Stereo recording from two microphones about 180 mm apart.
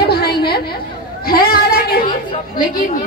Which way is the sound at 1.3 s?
55° left (ahead or behind).